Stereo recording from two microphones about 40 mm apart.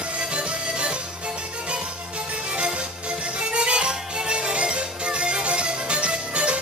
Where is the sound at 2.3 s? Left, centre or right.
Right.